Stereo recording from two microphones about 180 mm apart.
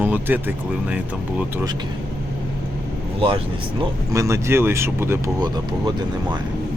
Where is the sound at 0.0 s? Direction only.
10° right (ahead or behind).